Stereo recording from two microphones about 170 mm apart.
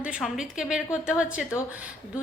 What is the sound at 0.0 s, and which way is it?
A woman's voice, 5° right (ahead or behind).